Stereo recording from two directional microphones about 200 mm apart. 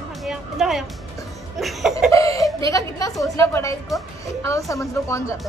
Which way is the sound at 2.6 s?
15° left (ahead or behind).